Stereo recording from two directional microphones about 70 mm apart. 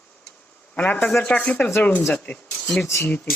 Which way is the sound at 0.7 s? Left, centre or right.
Left.